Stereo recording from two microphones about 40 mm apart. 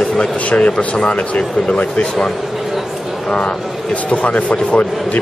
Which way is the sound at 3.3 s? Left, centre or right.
Left.